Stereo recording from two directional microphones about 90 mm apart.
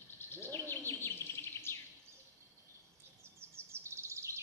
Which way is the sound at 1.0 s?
25° left (ahead or behind).